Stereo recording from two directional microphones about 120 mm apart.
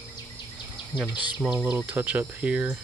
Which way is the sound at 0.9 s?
10° right (ahead or behind).